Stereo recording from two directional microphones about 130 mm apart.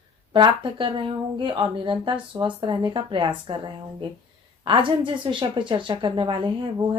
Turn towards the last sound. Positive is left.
turn(degrees=-40)  # may be behind; listen again after turning